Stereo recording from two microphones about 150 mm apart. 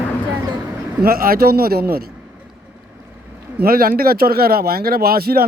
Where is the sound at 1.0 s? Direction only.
80° right.